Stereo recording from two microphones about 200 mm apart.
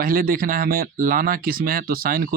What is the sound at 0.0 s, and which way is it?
Speech, 45° right (ahead or behind).